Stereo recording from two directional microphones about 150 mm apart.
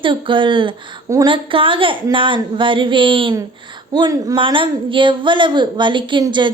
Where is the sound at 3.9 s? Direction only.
25° right (ahead or behind).